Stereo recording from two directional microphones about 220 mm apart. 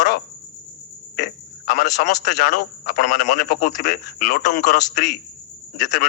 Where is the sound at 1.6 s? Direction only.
40° left (ahead or behind).